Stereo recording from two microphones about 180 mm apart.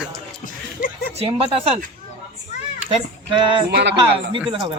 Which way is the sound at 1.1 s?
30° right (ahead or behind).